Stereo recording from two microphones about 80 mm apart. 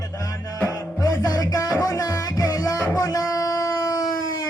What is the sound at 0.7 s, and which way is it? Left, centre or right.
Music, left.